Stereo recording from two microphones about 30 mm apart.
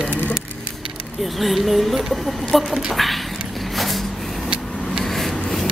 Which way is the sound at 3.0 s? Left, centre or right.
Centre.